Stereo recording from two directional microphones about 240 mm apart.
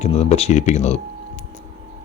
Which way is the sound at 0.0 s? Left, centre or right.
Left.